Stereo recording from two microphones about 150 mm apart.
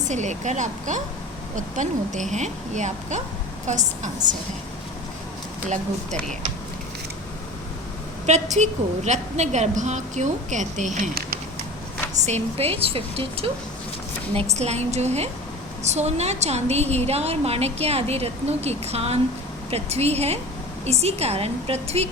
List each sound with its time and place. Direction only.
0.0 s a woman's voice: 50° right (ahead or behind)
5.6 s a woman's voice: 50° right (ahead or behind)
8.3 s a woman's voice: 50° right (ahead or behind)
12.2 s a woman's voice: 45° right (ahead or behind)